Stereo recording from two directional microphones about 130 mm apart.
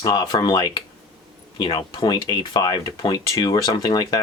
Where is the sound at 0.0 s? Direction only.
30° left (ahead or behind).